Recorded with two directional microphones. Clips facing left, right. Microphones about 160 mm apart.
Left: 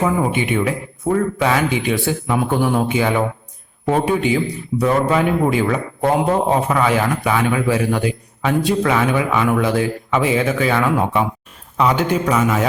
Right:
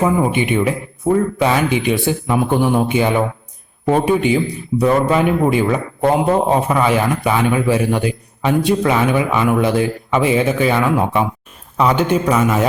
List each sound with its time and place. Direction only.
0.0 s a man's voice: 20° right (ahead or behind)